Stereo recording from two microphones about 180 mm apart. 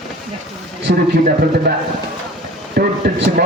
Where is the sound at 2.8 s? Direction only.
55° right (ahead or behind).